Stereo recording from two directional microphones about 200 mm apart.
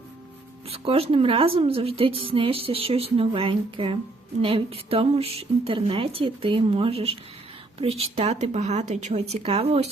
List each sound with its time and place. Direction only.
0.7 s a woman's voice: 30° right (ahead or behind)